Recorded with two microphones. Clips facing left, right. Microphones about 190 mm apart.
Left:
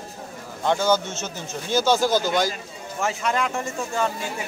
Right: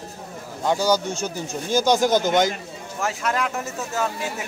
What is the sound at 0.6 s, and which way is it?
A man's voice, 10° right (ahead or behind).